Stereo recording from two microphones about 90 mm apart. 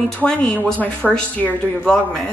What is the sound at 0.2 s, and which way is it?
Speech, 10° left (ahead or behind).